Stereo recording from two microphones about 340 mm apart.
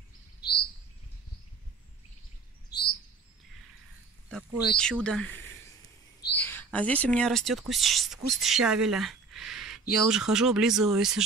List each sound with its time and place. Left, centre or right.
0.4 s chirp: left
4.3 s speech: centre
6.3 s speech: centre